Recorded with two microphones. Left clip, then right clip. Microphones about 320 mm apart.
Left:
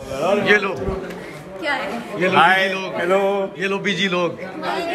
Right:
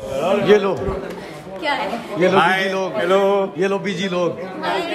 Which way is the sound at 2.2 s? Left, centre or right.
Centre.